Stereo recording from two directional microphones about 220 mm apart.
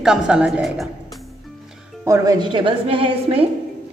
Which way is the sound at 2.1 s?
20° right (ahead or behind).